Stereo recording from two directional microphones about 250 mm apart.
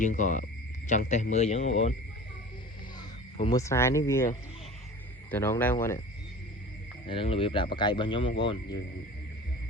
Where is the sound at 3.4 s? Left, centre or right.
Centre.